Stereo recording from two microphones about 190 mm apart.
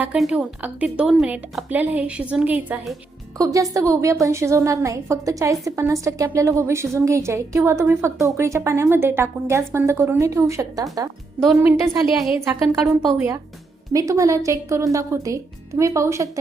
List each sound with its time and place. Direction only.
0.0 s a woman's voice: 5° right (ahead or behind)
3.3 s a woman's voice: 20° right (ahead or behind)
12.0 s speech: centre (ahead or behind)
13.1 s a woman's voice: 15° right (ahead or behind)